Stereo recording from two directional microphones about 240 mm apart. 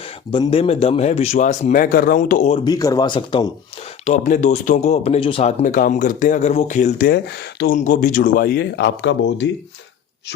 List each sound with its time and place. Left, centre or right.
0.3 s speech: left
2.5 s speech: centre
4.0 s speech: left
7.8 s speech: left